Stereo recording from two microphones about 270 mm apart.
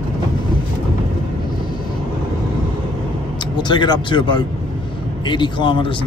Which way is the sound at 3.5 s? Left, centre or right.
Centre.